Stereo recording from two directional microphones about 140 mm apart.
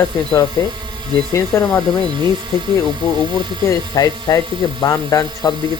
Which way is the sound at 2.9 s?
30° right (ahead or behind).